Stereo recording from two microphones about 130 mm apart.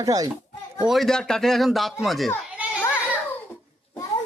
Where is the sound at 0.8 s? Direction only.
Centre (ahead or behind).